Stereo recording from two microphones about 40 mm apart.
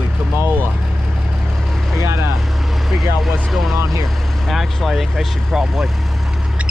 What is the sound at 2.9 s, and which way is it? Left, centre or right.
Speech, centre.